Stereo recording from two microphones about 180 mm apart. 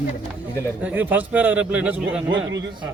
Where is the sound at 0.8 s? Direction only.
10° right (ahead or behind).